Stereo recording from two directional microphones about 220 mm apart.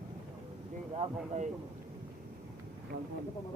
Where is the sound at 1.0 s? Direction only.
30° right (ahead or behind).